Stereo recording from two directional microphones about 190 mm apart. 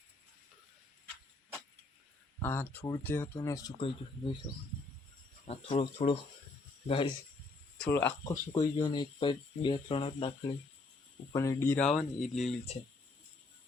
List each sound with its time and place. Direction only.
2.4 s speech: 10° left (ahead or behind); by 4.4 s 30° left (ahead or behind)
5.5 s speech: 30° left (ahead or behind)
7.8 s speech: 10° left (ahead or behind); by 10.5 s 30° left (ahead or behind)
11.3 s speech: 15° left (ahead or behind)